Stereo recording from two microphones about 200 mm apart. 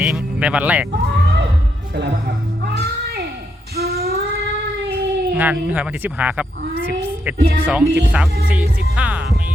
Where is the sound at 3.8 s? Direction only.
50° right (ahead or behind).